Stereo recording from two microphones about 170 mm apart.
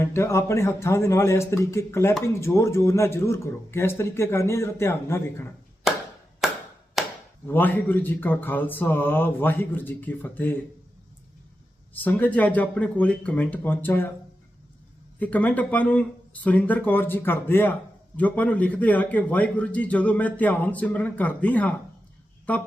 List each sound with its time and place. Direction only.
0.0 s a man's voice: 15° left (ahead or behind)
6.4 s a sound: centre (ahead or behind)
7.0 s chop: centre (ahead or behind)
7.4 s a man's voice: 10° left (ahead or behind)
12.0 s a man's voice: 10° left (ahead or behind)
15.2 s a man's voice: 10° left (ahead or behind)